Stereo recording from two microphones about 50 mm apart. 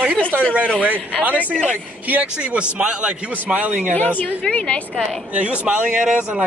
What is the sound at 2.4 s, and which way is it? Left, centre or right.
Speech, right.